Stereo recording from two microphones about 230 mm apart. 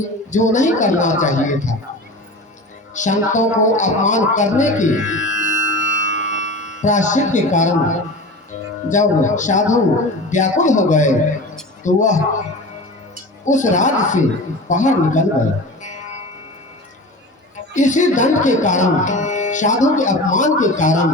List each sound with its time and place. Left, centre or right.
0.3 s speech: left
2.9 s speech: left
13.4 s speech: left
17.7 s speech: left